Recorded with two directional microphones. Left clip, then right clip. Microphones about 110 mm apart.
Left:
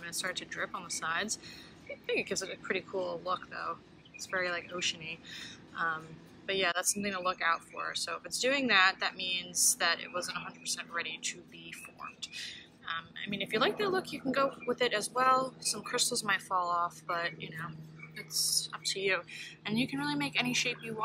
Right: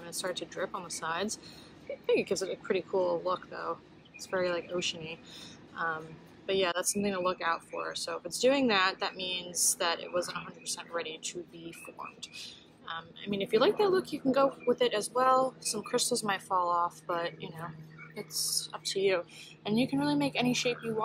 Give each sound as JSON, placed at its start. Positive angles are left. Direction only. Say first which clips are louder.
{"t": 0.0, "sound": "a woman's voice", "louder": "right 1 dB", "side_deg": -30}